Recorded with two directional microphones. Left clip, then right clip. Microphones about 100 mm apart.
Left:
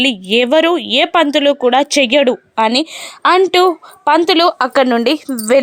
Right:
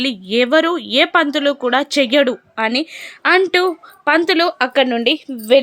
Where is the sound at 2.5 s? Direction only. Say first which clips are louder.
Left 4 dB; 40° left (ahead or behind).